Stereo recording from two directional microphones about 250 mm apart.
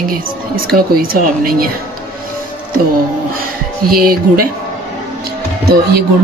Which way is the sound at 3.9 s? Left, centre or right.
Right.